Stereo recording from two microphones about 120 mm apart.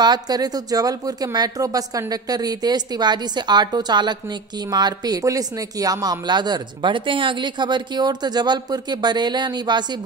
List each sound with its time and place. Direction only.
0.0 s speech: 35° right (ahead or behind)